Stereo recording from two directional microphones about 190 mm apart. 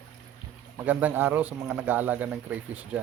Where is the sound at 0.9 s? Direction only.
10° right (ahead or behind).